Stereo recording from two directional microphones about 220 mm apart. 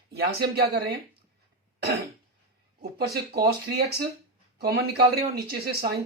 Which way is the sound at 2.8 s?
45° right (ahead or behind).